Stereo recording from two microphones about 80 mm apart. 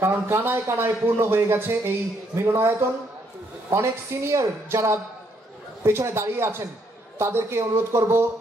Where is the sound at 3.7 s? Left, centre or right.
Right.